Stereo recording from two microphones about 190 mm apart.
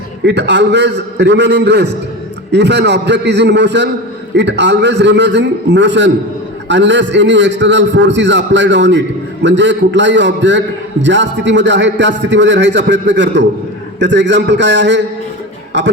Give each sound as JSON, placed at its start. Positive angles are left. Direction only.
{"t": 0.3, "sound": "a man's voice", "side_deg": -65}